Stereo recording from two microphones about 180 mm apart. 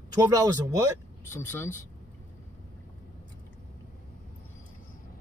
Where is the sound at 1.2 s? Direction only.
15° left (ahead or behind).